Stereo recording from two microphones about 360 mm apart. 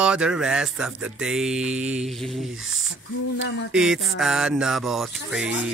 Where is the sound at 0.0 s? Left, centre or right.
Centre.